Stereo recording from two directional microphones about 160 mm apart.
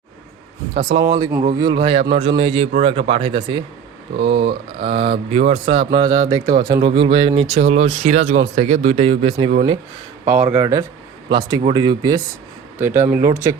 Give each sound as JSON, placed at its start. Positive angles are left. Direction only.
{"t": 0.7, "sound": "speech", "side_deg": -35}
{"t": 1.0, "sound": "speech", "side_deg": -25}
{"t": 6.8, "sound": "speech", "side_deg": -35}
{"t": 10.2, "sound": "speech", "side_deg": -10}
{"t": 12.8, "sound": "speech", "side_deg": -15}